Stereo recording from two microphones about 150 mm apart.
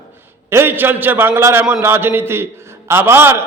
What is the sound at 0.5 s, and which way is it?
A man's voice, 15° right (ahead or behind).